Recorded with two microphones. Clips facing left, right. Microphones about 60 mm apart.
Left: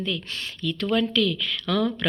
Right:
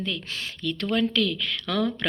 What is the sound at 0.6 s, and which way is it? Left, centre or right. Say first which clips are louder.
Speech: left 1 dB; right.